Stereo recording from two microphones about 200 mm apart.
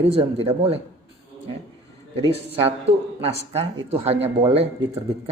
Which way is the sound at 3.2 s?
30° right (ahead or behind).